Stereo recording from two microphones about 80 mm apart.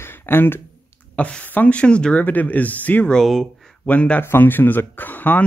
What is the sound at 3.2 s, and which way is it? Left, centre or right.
Speech, centre.